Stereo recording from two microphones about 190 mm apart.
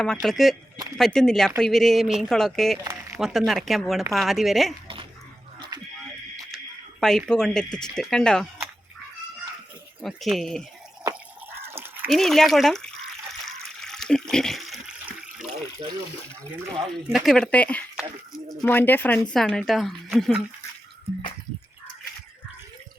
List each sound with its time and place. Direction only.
0.0 s speech: centre (ahead or behind)
2.7 s a sound: 15° right (ahead or behind)
3.2 s speech: centre (ahead or behind)
5.5 s a sound: 25° right (ahead or behind)
7.0 s speech: centre (ahead or behind)
10.0 s speech: centre (ahead or behind)
12.0 s speech: centre (ahead or behind)
13.7 s toilet flush: centre (ahead or behind)
17.1 s speech: centre (ahead or behind)